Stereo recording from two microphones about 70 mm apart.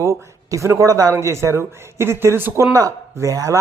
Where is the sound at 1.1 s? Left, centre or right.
Right.